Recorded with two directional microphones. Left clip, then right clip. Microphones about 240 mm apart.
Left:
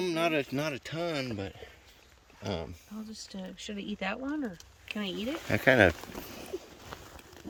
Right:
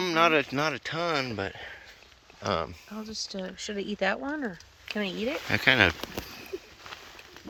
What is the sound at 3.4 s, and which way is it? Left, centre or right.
Speech, centre.